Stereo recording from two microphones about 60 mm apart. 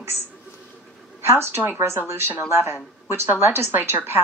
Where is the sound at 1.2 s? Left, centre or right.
Right.